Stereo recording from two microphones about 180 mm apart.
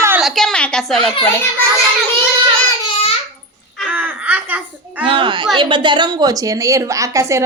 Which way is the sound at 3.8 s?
10° right (ahead or behind).